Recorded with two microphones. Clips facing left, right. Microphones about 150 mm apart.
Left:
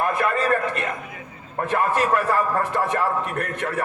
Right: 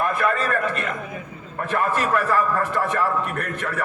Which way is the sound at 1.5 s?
30° left (ahead or behind).